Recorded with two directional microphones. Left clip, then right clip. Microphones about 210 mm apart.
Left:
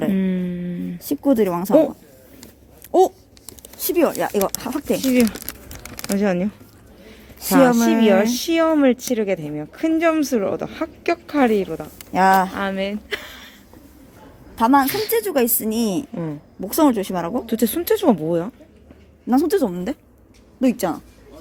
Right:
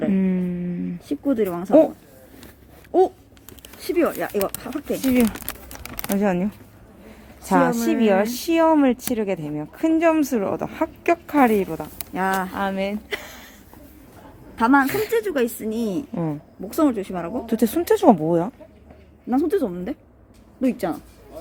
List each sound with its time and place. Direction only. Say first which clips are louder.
0.1 s a sound: even; centre (ahead or behind)
1.0 s speech: left 4 dB; 35° left (ahead or behind)
3.8 s speech: left 3 dB; 30° left (ahead or behind)
5.0 s speech: left 1 dB; centre (ahead or behind)
5.6 s a sound: left 1 dB; centre (ahead or behind)
7.7 s speech: left 5 dB; 40° left (ahead or behind)
8.0 s speech: even; centre (ahead or behind)
12.1 s speech: left 8 dB; 40° left (ahead or behind)
12.5 s a woman's voice: left 1 dB; centre (ahead or behind)
14.5 s a woman's voice: left 2 dB; 20° left (ahead or behind)
14.8 s speech: even; 10° right (ahead or behind)
15.1 s speech: left 2 dB; 25° left (ahead or behind)
17.4 s speech: even; 10° right (ahead or behind)
19.3 s speech: left 3 dB; 35° left (ahead or behind)